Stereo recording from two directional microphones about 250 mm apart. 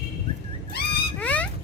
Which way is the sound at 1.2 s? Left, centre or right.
Centre.